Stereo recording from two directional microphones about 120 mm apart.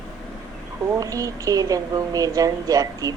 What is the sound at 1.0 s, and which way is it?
A woman's voice, 30° right (ahead or behind).